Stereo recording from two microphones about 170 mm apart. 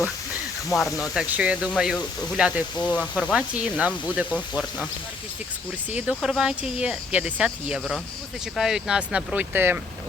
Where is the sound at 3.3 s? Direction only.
5° right (ahead or behind).